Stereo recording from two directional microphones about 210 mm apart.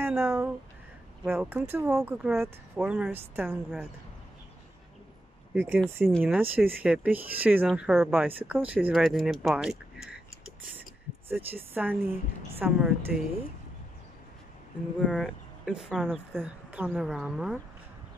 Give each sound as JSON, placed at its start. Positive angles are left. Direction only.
{"t": 0.0, "sound": "a sound", "side_deg": -10}
{"t": 1.2, "sound": "a woman's voice", "side_deg": -5}
{"t": 5.5, "sound": "a woman's voice", "side_deg": -10}
{"t": 11.2, "sound": "a woman's voice", "side_deg": -10}
{"t": 15.0, "sound": "speech", "side_deg": 0}